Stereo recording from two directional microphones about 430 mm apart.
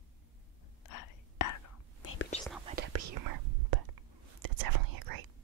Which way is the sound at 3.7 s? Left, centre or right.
Right.